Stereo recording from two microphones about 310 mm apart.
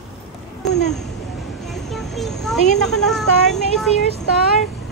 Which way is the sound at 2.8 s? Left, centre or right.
Centre.